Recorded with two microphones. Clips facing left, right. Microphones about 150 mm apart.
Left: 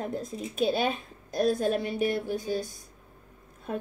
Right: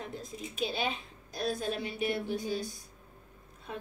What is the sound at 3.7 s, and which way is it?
Speech, 45° left (ahead or behind).